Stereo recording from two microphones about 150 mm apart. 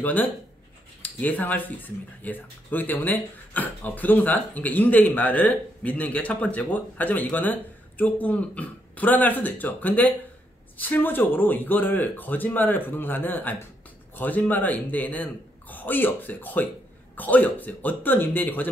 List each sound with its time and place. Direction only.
0.0 s speech: 10° left (ahead or behind)